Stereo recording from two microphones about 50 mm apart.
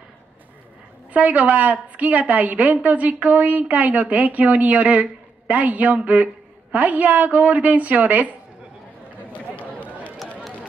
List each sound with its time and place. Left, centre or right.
1.1 s a woman's voice: right
9.3 s run: left